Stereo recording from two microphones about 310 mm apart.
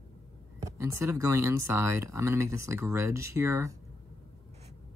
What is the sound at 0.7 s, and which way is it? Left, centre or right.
Speech, centre.